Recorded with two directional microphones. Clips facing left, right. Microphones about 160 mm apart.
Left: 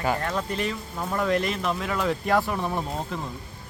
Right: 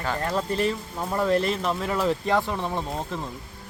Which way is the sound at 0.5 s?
35° right (ahead or behind).